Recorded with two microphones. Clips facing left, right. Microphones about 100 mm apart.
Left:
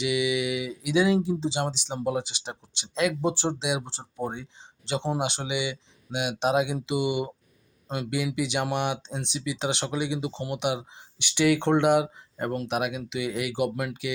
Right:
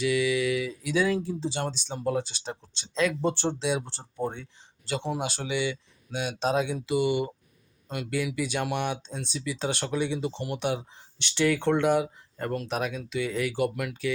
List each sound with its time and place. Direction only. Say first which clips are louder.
0.0 s speech: right 1 dB; 20° left (ahead or behind)